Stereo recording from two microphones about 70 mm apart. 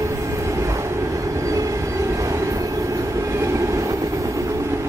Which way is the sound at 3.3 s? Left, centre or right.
Right.